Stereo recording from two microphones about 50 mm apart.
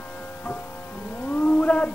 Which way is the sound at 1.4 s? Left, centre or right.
Left.